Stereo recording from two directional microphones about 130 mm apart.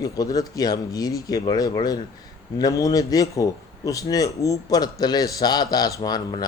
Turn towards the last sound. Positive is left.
turn(degrees=30)  # may be behind; listen again after turning